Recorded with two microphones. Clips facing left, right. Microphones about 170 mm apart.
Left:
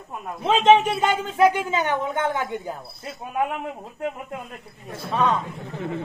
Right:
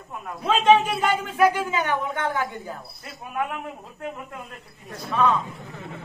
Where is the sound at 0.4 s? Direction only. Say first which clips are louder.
Left 2 dB; 25° left (ahead or behind).